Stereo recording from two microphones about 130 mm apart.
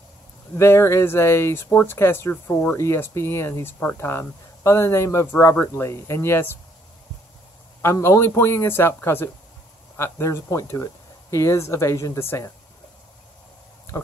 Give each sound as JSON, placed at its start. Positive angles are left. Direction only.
{"t": 0.6, "sound": "speech", "side_deg": 20}
{"t": 7.8, "sound": "speech", "side_deg": 20}